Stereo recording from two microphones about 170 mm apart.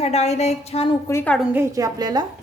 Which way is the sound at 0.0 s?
40° left (ahead or behind).